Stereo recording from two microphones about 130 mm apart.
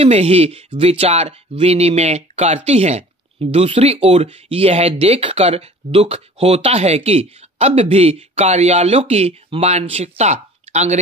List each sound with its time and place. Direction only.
0.0 s speech: 50° right (ahead or behind)